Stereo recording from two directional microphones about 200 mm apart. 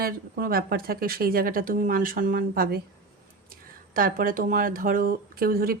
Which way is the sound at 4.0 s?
45° right (ahead or behind).